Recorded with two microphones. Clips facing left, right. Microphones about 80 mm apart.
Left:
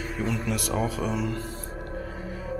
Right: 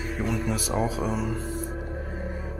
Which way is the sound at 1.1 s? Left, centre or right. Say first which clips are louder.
Even; centre.